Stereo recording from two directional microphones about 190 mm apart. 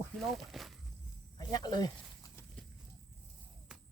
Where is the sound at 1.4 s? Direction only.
20° left (ahead or behind).